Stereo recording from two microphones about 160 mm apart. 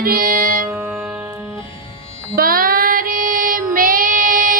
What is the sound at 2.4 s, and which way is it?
Child singing, 65° right (ahead or behind).